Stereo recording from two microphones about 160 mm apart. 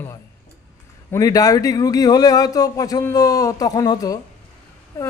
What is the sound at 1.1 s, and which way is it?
A man's voice, 20° left (ahead or behind).